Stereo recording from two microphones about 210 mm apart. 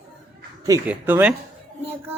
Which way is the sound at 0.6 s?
10° right (ahead or behind).